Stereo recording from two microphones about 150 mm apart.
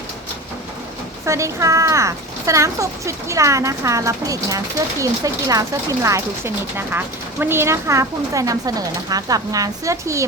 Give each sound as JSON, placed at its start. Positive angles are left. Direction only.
{"t": 1.2, "sound": "speech", "side_deg": -20}